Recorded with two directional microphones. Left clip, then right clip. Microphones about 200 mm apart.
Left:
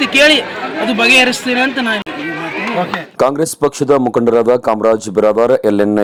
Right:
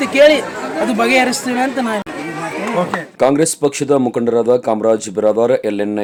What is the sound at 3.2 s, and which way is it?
Speech, 25° left (ahead or behind).